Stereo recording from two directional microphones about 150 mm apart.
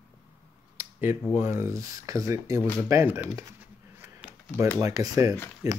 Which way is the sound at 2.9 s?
20° right (ahead or behind).